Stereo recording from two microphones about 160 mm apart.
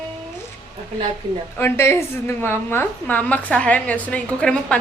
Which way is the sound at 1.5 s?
15° left (ahead or behind).